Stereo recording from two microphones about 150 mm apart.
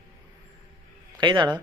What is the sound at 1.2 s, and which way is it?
Speech, 30° right (ahead or behind).